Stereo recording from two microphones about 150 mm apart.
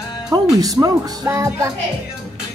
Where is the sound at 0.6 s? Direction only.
25° right (ahead or behind).